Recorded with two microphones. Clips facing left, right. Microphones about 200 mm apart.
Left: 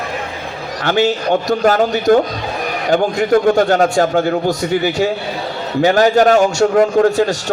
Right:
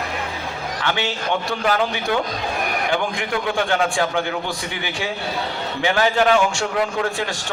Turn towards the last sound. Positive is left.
turn(degrees=40)  # may be behind; listen again after turning